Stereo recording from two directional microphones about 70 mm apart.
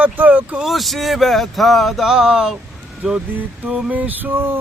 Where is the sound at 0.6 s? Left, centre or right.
Centre.